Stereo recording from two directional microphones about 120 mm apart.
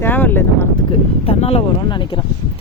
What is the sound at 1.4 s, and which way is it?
Speech, 55° left (ahead or behind).